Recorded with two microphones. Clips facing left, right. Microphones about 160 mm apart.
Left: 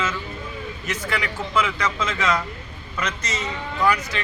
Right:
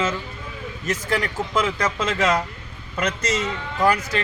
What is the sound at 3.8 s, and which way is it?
Speech, 45° right (ahead or behind).